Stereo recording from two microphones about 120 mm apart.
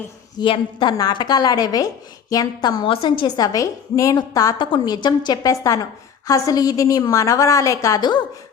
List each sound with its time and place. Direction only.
0.3 s a woman's voice: 45° left (ahead or behind)
2.8 s a woman's voice: 45° left (ahead or behind)